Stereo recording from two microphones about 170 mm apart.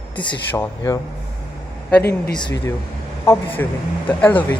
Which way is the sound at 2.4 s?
20° left (ahead or behind).